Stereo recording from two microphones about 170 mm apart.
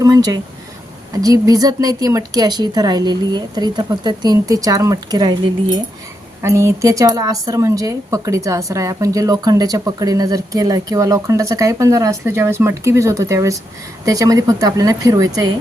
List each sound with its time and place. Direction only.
0.0 s a woman's voice: 20° right (ahead or behind)
6.4 s a woman's voice: 15° right (ahead or behind)